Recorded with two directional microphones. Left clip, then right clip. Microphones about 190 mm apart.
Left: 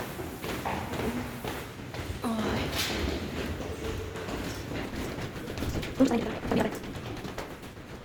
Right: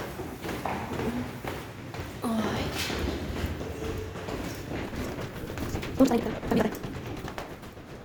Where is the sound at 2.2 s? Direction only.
15° right (ahead or behind).